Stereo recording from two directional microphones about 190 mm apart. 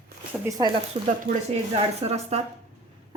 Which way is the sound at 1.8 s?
35° right (ahead or behind).